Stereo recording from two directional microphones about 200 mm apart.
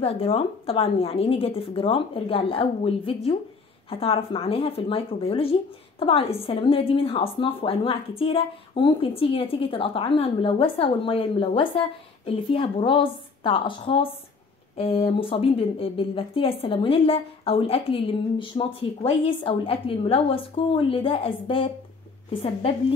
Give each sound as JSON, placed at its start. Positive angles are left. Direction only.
{"t": 0.0, "sound": "speech", "side_deg": 30}